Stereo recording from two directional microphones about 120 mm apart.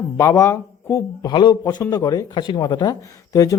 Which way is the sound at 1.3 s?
40° left (ahead or behind).